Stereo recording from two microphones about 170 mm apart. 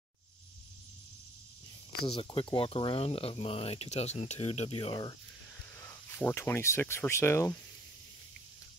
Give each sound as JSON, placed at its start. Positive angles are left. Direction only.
{"t": 2.0, "sound": "speech", "side_deg": 30}
{"t": 5.8, "sound": "speech", "side_deg": 15}